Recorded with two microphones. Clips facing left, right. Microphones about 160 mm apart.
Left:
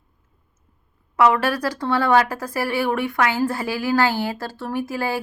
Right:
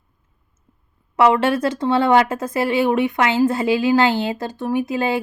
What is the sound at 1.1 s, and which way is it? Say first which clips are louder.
Speech: right 3 dB; 25° right (ahead or behind).